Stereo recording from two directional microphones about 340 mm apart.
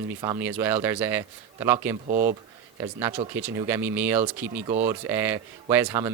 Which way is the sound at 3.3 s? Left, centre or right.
Centre.